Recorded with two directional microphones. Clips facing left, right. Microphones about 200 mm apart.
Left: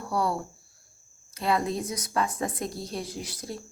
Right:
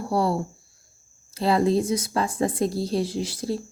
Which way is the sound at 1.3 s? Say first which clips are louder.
Right 6 dB; 30° right (ahead or behind).